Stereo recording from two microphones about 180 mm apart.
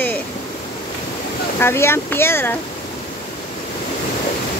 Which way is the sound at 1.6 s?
15° left (ahead or behind).